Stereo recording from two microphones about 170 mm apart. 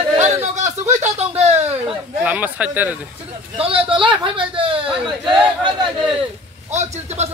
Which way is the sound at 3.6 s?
30° right (ahead or behind).